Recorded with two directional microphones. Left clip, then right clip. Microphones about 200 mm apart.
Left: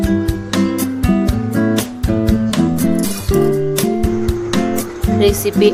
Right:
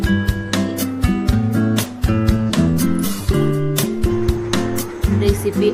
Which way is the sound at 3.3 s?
Centre (ahead or behind).